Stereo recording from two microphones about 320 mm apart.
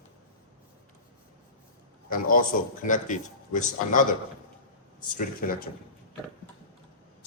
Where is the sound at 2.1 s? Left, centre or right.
Left.